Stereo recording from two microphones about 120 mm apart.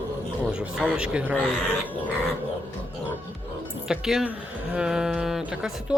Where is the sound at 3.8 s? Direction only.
5° right (ahead or behind).